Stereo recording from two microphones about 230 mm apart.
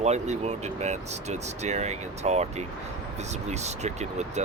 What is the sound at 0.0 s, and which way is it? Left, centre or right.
Speech, right.